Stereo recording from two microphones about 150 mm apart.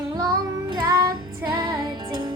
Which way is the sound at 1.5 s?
25° right (ahead or behind).